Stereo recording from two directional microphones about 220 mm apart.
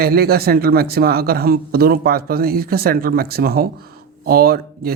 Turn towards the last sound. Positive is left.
turn(degrees=-45)  # may be behind; listen again after turning